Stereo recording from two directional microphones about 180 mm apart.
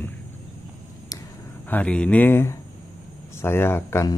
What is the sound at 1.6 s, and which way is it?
Speech, 5° left (ahead or behind).